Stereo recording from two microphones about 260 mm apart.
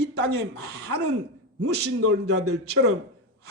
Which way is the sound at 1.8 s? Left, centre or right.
Right.